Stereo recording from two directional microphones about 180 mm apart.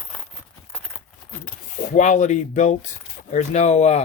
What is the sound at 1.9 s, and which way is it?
Speech, 45° left (ahead or behind).